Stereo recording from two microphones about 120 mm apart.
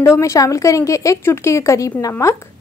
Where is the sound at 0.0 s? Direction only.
25° left (ahead or behind).